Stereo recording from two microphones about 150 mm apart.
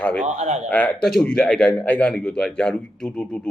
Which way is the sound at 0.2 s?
50° right (ahead or behind).